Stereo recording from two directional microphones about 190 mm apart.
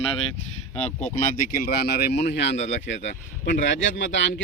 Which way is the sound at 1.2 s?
55° left (ahead or behind).